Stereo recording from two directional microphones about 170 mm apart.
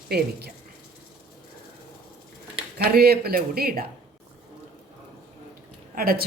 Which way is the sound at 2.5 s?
65° right (ahead or behind).